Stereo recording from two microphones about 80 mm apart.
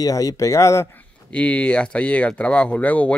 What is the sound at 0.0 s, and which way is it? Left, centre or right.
Speech, left.